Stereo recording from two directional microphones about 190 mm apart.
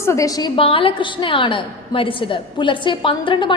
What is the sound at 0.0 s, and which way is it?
A woman's voice, 15° left (ahead or behind).